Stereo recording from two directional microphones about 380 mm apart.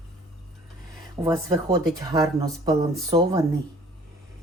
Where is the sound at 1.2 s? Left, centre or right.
Centre.